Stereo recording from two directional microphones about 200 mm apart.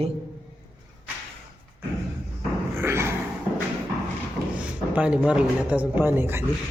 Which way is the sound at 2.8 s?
10° right (ahead or behind).